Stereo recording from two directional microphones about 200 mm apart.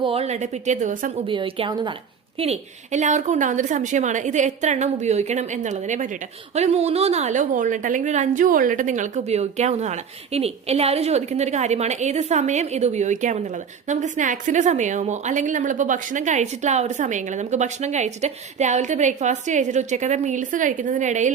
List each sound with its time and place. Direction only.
0.0 s a woman's voice: 30° right (ahead or behind)
1.3 s a woman's voice: 25° right (ahead or behind)
2.4 s a woman's voice: 35° right (ahead or behind)